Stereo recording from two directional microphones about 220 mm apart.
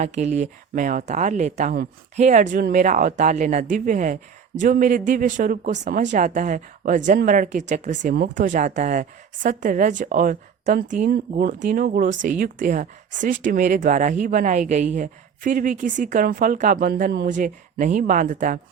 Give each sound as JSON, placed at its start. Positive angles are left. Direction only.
{"t": 0.0, "sound": "a woman's voice", "side_deg": -30}